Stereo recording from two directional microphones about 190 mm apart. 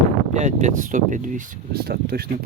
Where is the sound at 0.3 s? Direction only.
40° right (ahead or behind).